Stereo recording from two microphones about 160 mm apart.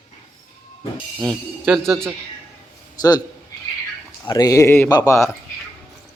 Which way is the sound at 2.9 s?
25° left (ahead or behind).